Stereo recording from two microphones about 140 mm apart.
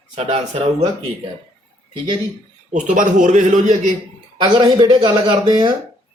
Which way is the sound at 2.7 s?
65° right (ahead or behind).